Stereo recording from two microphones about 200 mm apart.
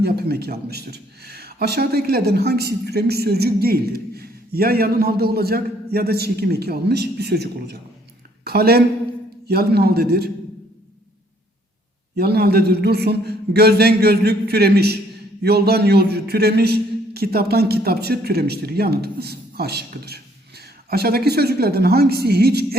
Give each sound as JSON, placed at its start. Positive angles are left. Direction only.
{"t": 0.0, "sound": "a woman's voice", "side_deg": -50}
{"t": 12.1, "sound": "speech", "side_deg": -50}